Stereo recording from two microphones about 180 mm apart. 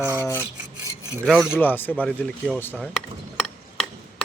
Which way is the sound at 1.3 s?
Centre (ahead or behind).